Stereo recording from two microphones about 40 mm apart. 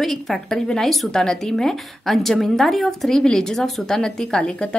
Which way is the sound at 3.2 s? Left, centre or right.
Centre.